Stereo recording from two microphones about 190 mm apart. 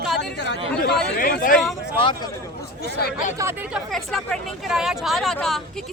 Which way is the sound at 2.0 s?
25° left (ahead or behind).